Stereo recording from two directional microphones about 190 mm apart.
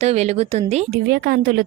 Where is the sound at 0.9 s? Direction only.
55° right (ahead or behind).